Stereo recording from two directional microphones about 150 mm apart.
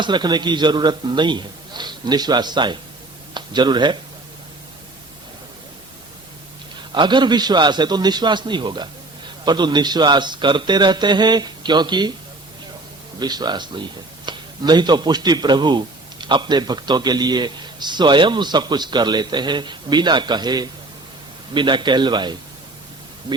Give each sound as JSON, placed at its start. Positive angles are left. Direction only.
{"t": 0.0, "sound": "a man's voice", "side_deg": -30}
{"t": 6.9, "sound": "a man's voice", "side_deg": -30}
{"t": 13.1, "sound": "a man's voice", "side_deg": -25}